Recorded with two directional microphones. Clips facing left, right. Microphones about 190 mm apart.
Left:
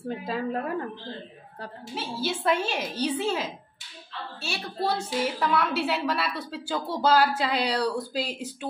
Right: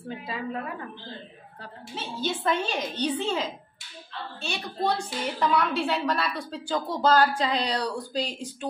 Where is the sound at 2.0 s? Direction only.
10° left (ahead or behind).